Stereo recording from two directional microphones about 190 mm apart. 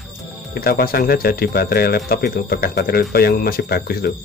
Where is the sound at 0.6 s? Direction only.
55° left (ahead or behind).